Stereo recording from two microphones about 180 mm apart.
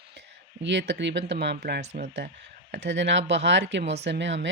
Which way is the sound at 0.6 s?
75° right (ahead or behind).